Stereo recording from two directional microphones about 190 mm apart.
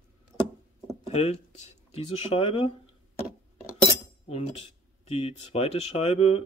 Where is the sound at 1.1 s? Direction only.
35° left (ahead or behind).